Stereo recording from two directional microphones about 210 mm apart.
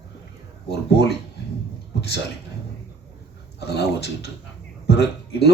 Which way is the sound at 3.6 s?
50° left (ahead or behind).